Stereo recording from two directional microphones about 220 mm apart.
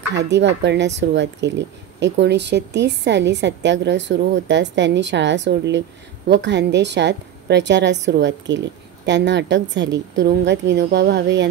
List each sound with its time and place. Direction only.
0.1 s a woman's voice: 50° right (ahead or behind)